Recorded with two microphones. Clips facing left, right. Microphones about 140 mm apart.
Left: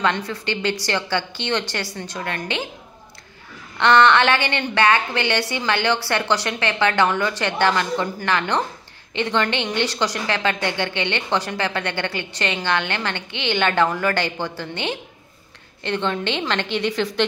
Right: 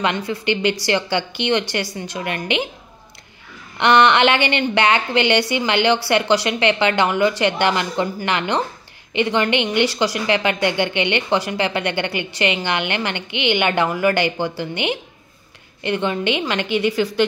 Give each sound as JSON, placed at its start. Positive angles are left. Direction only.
{"t": 0.0, "sound": "a woman's voice", "side_deg": -15}
{"t": 3.7, "sound": "a woman's voice", "side_deg": -15}